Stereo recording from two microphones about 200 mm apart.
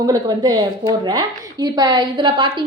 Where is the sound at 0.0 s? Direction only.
20° right (ahead or behind).